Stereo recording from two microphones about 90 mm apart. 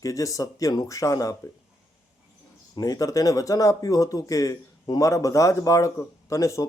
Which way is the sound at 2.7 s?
45° left (ahead or behind).